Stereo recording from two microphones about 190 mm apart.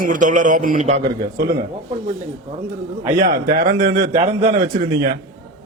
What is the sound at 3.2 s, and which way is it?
A man's voice, 45° right (ahead or behind).